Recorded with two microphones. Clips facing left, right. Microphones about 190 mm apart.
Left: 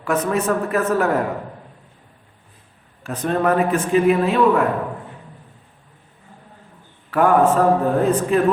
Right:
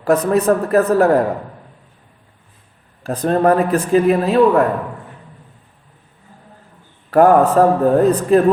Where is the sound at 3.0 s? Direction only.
35° right (ahead or behind).